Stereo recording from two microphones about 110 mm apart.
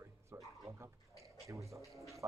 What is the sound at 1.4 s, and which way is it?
Speech, 30° right (ahead or behind).